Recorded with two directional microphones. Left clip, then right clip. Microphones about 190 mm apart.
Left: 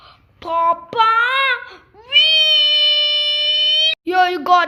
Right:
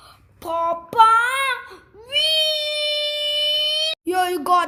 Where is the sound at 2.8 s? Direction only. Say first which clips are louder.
Left 8 dB; 10° right (ahead or behind).